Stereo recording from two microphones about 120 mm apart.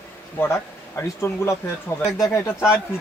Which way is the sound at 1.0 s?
20° left (ahead or behind).